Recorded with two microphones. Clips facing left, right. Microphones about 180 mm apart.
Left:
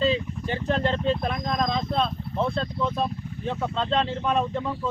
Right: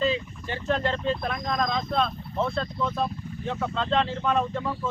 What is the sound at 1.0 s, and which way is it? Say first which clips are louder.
Speech: left 2 dB; 25° left (ahead or behind).